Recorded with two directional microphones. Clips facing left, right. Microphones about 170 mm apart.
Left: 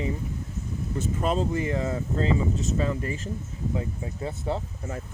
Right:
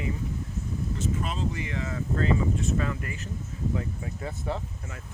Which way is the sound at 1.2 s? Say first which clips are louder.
Left 7 dB; 40° left (ahead or behind).